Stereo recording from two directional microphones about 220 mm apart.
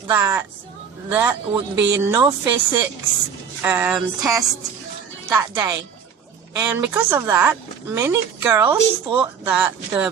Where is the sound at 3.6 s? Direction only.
10° right (ahead or behind).